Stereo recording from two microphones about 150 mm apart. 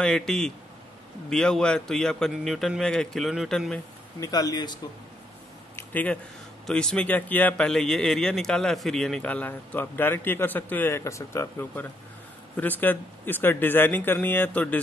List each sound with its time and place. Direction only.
0.0 s a man's voice: 5° left (ahead or behind)
4.2 s speech: 25° left (ahead or behind)
5.8 s a sound: 10° left (ahead or behind)
6.6 s a man's voice: 5° left (ahead or behind)